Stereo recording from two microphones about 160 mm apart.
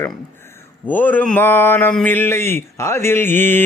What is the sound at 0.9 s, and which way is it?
Speech, 10° left (ahead or behind).